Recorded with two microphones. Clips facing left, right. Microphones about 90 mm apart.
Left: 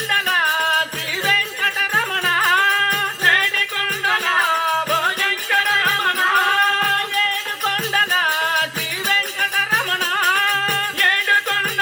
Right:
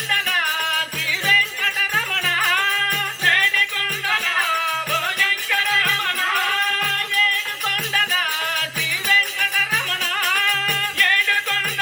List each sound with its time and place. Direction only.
0.1 s music: 30° left (ahead or behind)